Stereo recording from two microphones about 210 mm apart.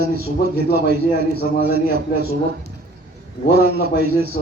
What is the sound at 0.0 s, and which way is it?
Speech, 45° right (ahead or behind).